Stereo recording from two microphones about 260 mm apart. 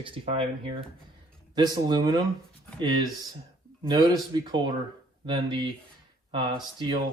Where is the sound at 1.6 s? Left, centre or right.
Centre.